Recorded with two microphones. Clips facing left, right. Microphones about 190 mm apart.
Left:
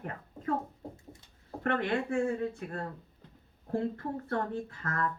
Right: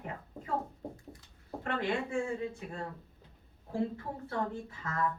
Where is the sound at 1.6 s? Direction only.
60° left (ahead or behind).